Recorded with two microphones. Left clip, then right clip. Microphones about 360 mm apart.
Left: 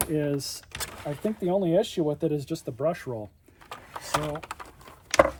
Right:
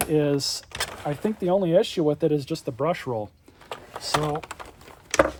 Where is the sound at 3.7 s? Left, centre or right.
Centre.